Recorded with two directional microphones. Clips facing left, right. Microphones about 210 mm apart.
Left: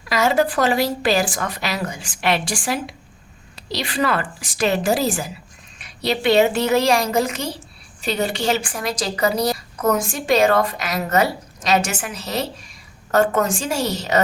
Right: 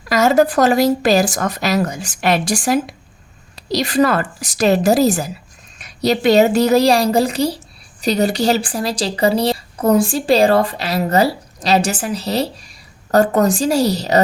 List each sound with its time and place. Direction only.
0.1 s a woman's voice: 40° right (ahead or behind)